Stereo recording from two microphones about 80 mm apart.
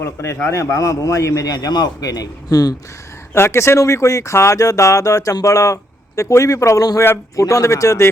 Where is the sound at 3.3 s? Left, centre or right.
Left.